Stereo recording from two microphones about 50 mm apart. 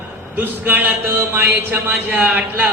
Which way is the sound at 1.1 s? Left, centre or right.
Right.